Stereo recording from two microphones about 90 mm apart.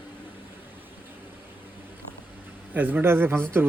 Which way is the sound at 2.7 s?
20° right (ahead or behind).